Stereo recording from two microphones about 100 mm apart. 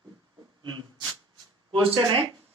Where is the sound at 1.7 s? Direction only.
60° right (ahead or behind).